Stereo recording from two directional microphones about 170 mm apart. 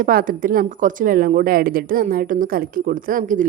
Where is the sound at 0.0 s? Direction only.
55° right (ahead or behind).